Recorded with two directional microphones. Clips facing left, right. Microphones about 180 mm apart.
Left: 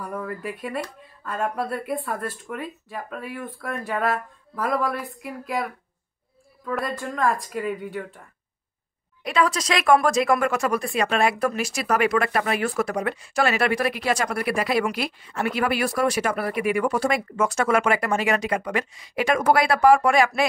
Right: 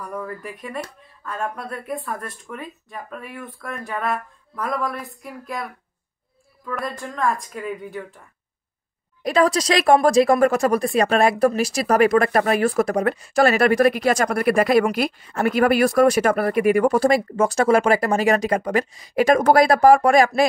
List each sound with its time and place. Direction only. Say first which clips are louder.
0.0 s speech: even; 5° left (ahead or behind)
3.6 s a sound: left 1 dB; 5° left (ahead or behind)
4.6 s speech: left 1 dB; centre (ahead or behind)
6.6 s speech: left 1 dB; centre (ahead or behind)
9.2 s speech: right 5 dB; 40° right (ahead or behind)